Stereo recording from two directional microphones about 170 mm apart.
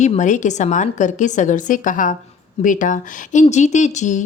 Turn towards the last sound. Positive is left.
turn(degrees=45)  # may be behind; listen again after turning